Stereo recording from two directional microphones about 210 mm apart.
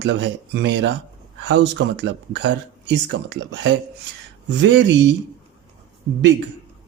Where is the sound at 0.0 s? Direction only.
55° right (ahead or behind).